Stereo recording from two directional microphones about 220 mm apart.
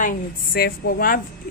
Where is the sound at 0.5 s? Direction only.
45° left (ahead or behind).